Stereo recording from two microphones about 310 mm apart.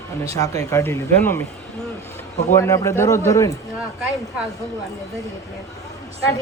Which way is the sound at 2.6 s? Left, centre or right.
Centre.